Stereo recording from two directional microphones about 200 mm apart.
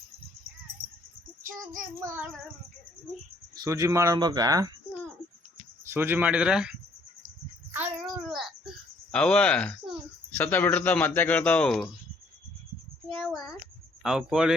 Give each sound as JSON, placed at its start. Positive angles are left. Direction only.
{"t": 2.0, "sound": "speech", "side_deg": -10}
{"t": 3.5, "sound": "speech", "side_deg": -15}
{"t": 5.8, "sound": "speech", "side_deg": -10}
{"t": 8.0, "sound": "a sound", "side_deg": 0}
{"t": 9.1, "sound": "speech", "side_deg": 5}
{"t": 13.1, "sound": "a sound", "side_deg": 0}
{"t": 14.0, "sound": "speech", "side_deg": -5}